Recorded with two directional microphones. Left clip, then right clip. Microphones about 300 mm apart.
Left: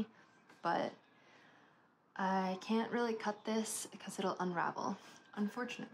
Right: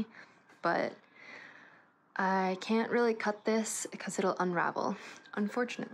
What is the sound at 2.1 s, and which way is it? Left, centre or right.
Speech, centre.